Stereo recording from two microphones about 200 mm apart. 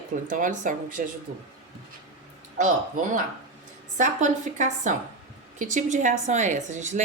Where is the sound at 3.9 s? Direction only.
40° right (ahead or behind).